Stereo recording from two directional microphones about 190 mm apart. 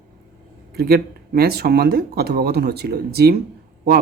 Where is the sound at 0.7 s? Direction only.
55° right (ahead or behind).